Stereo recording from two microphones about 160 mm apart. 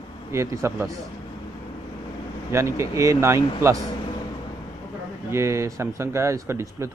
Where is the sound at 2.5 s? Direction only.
15° right (ahead or behind).